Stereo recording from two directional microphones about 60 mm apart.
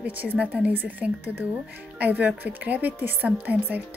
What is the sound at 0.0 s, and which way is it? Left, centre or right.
A woman's voice, right.